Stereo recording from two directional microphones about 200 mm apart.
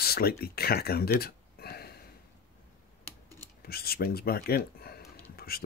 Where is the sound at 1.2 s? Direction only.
50° left (ahead or behind).